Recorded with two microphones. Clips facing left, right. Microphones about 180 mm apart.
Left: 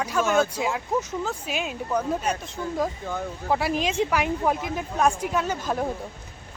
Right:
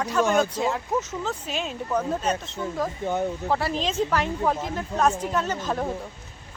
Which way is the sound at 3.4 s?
10° left (ahead or behind).